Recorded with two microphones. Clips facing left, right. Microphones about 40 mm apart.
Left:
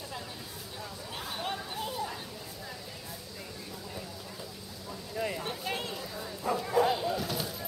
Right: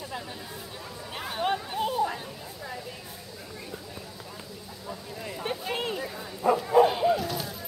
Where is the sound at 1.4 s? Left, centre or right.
Right.